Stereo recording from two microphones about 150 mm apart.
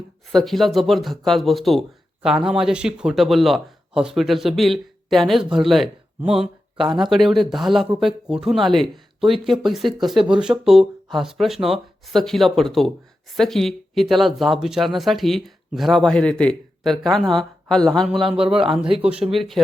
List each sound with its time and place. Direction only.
0.3 s speech: centre (ahead or behind)
18.4 s speech: 35° right (ahead or behind)
19.0 s speech: 5° right (ahead or behind)